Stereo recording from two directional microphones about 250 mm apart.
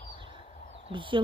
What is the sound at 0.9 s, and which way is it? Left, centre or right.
Speech, centre.